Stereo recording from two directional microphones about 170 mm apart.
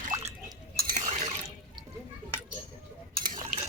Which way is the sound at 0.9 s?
45° right (ahead or behind).